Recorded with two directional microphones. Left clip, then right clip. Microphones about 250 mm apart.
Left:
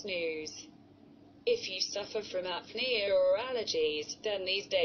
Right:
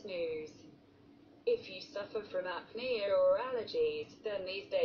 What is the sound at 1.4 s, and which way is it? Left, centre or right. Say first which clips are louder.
A woman's voice: left 3 dB; left.